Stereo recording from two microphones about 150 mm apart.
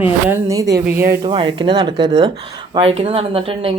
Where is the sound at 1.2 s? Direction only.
35° right (ahead or behind).